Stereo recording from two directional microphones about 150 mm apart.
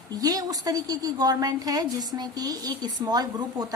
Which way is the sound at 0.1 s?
25° right (ahead or behind).